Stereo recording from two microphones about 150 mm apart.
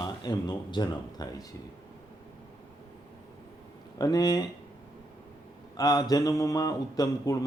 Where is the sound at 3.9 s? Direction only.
25° left (ahead or behind).